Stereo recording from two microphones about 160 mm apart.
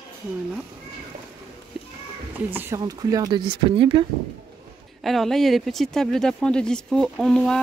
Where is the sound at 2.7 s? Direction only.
25° right (ahead or behind).